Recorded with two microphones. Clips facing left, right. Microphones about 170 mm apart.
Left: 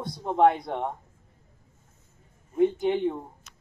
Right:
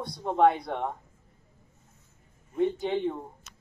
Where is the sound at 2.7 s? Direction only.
10° left (ahead or behind).